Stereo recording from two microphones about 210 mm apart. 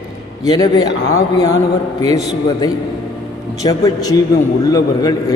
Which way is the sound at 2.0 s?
15° left (ahead or behind).